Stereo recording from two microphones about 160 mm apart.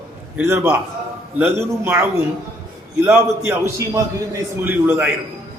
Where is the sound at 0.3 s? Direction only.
15° right (ahead or behind).